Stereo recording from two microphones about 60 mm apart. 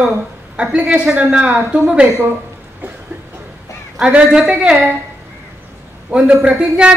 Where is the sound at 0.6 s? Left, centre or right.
Centre.